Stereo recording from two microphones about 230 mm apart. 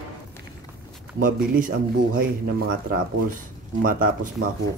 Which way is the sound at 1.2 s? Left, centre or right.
Right.